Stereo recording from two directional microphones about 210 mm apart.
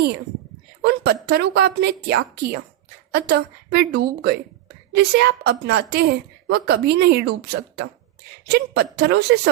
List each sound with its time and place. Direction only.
0.8 s a woman's voice: 50° right (ahead or behind)